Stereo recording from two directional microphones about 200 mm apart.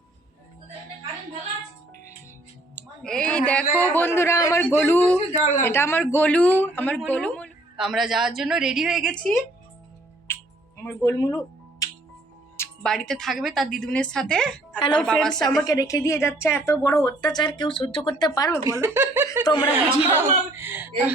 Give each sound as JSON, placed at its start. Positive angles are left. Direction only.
{"t": 2.7, "sound": "a sound", "side_deg": 5}
{"t": 3.9, "sound": "a woman's voice", "side_deg": 10}
{"t": 10.3, "sound": "music", "side_deg": 10}
{"t": 10.8, "sound": "a woman's voice", "side_deg": 15}
{"t": 11.8, "sound": "music", "side_deg": 15}
{"t": 12.5, "sound": "a woman's voice", "side_deg": 5}
{"t": 15.6, "sound": "a woman's voice", "side_deg": 15}
{"t": 18.6, "sound": "speech", "side_deg": -15}
{"t": 19.5, "sound": "speech", "side_deg": 20}
{"t": 20.1, "sound": "speech", "side_deg": -10}